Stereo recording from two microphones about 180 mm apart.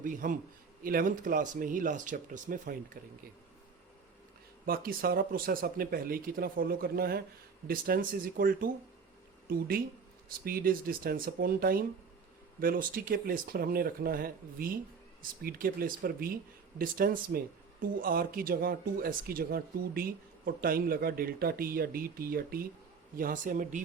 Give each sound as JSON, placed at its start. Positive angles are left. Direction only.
{"t": 0.0, "sound": "speech", "side_deg": -50}
{"t": 4.6, "sound": "speech", "side_deg": -55}